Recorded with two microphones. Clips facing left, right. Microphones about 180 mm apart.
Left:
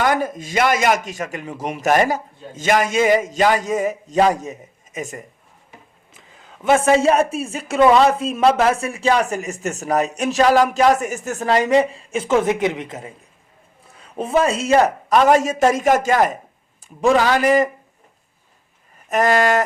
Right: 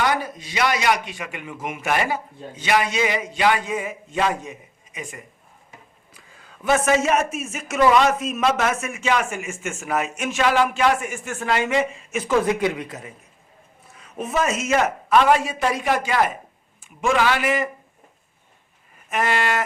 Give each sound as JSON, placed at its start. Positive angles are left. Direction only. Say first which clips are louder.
{"t": 0.0, "sound": "a man's voice", "louder": "left 4 dB", "side_deg": 50}
{"t": 6.1, "sound": "a man's voice", "louder": "left 3 dB", "side_deg": 20}
{"t": 19.0, "sound": "a man's voice", "louder": "left 6 dB", "side_deg": 40}